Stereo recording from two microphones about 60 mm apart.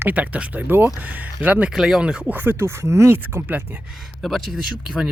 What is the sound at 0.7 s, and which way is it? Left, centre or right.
Speech, right.